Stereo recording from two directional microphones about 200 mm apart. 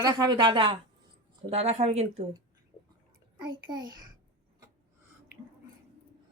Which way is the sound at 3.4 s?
20° right (ahead or behind).